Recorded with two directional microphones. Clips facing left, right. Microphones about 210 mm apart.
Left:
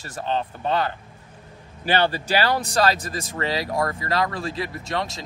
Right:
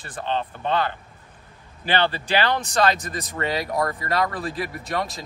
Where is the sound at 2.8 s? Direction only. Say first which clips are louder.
Even; 30° left (ahead or behind).